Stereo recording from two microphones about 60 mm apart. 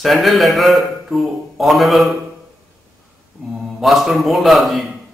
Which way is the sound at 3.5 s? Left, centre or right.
Centre.